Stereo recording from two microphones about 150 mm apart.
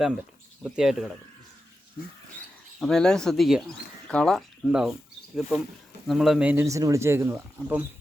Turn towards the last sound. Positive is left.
turn(degrees=-15)  # may be behind; listen again after turning